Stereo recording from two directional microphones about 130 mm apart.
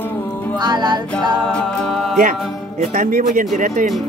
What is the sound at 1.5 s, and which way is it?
Music, 5° left (ahead or behind).